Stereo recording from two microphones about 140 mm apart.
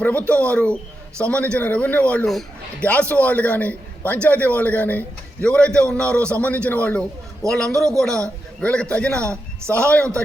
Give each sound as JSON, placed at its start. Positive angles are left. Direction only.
{"t": 0.0, "sound": "a man's voice", "side_deg": 10}
{"t": 9.2, "sound": "a man's voice", "side_deg": -20}
{"t": 9.7, "sound": "a man's voice", "side_deg": 10}